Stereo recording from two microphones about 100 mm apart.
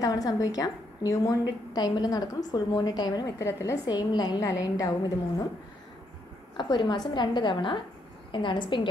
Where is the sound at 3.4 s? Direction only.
25° left (ahead or behind).